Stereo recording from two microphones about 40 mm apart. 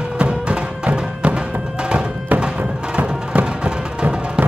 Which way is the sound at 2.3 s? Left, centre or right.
Right.